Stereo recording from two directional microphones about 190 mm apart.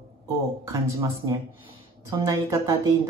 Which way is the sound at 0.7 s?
15° right (ahead or behind).